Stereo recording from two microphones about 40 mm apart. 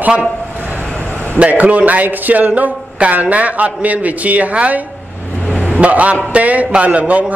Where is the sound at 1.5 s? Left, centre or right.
Right.